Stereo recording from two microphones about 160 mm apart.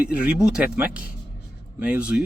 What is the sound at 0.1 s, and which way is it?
A man's voice, 5° right (ahead or behind).